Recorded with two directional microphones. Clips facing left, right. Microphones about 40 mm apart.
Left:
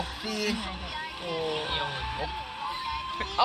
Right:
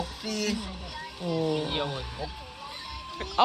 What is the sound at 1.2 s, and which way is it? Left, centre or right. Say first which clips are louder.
Speech: right 4 dB; left.